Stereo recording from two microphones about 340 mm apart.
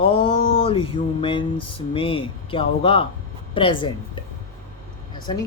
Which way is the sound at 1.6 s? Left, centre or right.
Left.